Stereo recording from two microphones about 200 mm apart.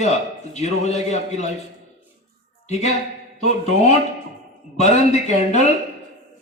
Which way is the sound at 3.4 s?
35° left (ahead or behind).